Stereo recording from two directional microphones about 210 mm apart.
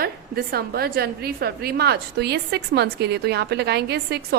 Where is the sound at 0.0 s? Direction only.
45° right (ahead or behind).